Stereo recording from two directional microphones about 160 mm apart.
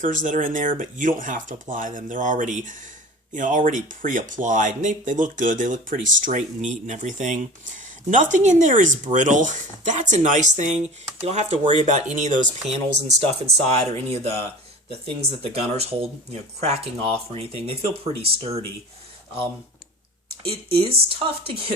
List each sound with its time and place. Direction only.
0.0 s speech: 55° right (ahead or behind); by 18.6 s 35° right (ahead or behind)
20.5 s speech: 35° right (ahead or behind)